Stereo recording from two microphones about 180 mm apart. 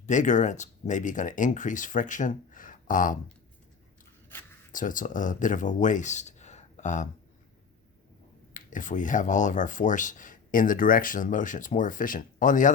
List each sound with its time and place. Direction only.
0.0 s speech: 45° left (ahead or behind)
4.7 s speech: 45° left (ahead or behind)
8.5 s speech: 45° left (ahead or behind)